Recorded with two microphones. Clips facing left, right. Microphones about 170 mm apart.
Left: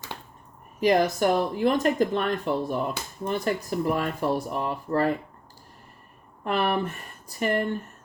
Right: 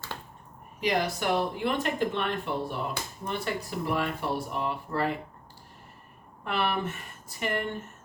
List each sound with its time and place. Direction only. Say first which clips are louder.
0.8 s speech: left 7 dB; 45° left (ahead or behind)
6.4 s speech: left 4 dB; 40° left (ahead or behind)